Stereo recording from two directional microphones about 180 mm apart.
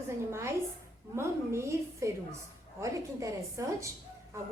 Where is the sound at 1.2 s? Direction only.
15° right (ahead or behind).